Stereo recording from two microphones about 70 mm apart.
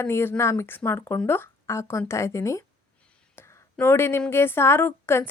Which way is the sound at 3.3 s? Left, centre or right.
Left.